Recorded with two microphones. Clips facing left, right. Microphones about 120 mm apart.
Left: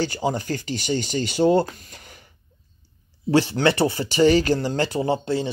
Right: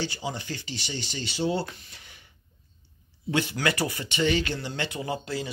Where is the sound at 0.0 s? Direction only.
45° left (ahead or behind).